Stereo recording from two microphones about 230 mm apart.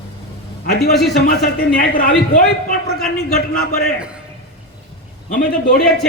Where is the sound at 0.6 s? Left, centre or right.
Left.